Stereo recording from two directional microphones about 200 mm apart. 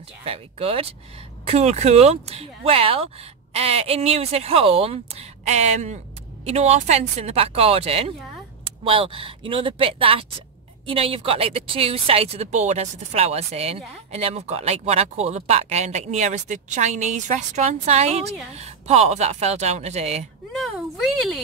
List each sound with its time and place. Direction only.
0.2 s speech: 30° right (ahead or behind)
20.5 s speech: centre (ahead or behind)